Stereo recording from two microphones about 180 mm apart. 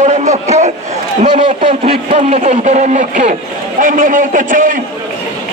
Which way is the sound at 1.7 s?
35° right (ahead or behind).